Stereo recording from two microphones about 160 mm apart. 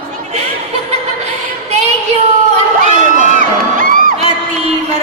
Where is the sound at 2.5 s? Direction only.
55° right (ahead or behind).